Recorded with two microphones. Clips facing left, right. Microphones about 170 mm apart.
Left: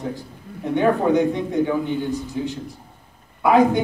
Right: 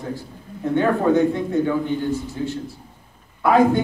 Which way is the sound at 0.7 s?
15° left (ahead or behind).